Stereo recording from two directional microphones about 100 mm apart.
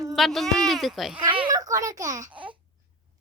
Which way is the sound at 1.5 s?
35° right (ahead or behind).